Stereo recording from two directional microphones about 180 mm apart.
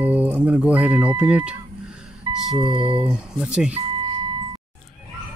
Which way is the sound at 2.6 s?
25° right (ahead or behind).